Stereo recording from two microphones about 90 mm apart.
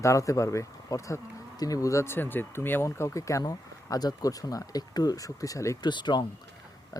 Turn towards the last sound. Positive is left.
turn(degrees=55)  # may be behind; listen again after turning